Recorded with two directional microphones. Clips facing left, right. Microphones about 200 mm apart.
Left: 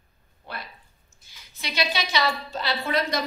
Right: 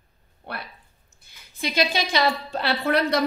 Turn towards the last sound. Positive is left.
turn(degrees=-65)  # may be behind; listen again after turning